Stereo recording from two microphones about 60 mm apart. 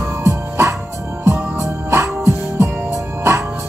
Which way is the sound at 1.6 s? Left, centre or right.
Right.